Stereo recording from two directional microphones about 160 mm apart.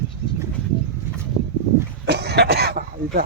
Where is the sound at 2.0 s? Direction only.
90° right; by 3.2 s 70° right (ahead or behind).